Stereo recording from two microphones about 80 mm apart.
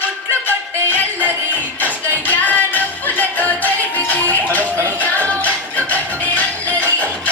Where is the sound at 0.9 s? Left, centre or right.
Left.